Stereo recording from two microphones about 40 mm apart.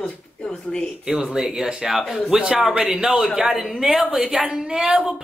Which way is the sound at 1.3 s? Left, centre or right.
Centre.